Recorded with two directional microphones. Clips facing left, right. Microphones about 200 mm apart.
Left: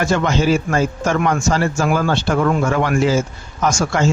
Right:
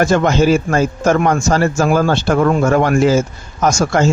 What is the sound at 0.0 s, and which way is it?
Speech, 45° right (ahead or behind).